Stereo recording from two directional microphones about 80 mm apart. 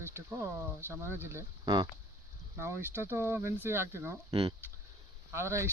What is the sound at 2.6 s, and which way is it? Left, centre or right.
Speech, right.